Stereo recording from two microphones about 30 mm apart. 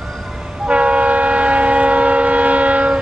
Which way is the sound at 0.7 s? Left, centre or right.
Right.